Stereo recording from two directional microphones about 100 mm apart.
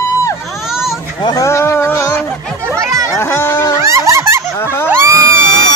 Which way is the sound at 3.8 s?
30° right (ahead or behind).